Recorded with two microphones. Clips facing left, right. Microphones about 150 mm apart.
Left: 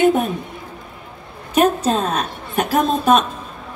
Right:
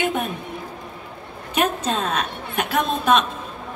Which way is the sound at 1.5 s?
40° left (ahead or behind).